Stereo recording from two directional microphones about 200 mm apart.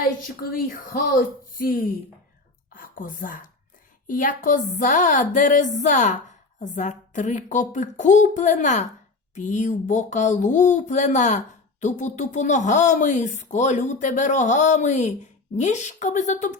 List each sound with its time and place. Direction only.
0.0 s a woman's voice: 45° left (ahead or behind)